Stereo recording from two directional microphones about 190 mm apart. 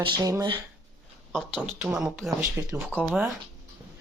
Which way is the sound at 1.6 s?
5° right (ahead or behind).